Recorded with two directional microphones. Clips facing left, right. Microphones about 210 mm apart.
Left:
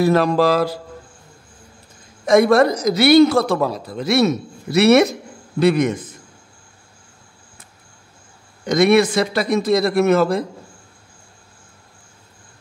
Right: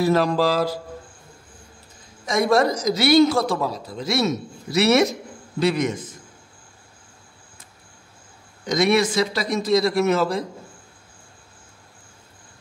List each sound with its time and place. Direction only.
0.0 s speech: 60° left (ahead or behind)
2.2 s speech: 60° left (ahead or behind)
8.6 s speech: 60° left (ahead or behind)